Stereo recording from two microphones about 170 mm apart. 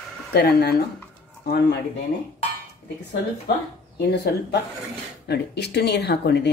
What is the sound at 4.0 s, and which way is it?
Speech, 75° left (ahead or behind).